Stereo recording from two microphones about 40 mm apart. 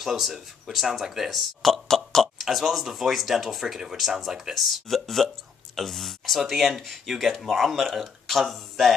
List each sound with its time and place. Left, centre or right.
0.0 s speech: centre
1.6 s a sound: centre
2.4 s speech: centre
4.6 s speech: centre